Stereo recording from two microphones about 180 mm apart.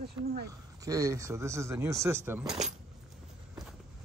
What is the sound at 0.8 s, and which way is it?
Speech, 20° right (ahead or behind).